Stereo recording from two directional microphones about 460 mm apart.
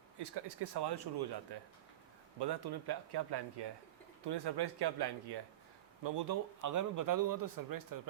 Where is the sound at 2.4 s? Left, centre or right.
Right.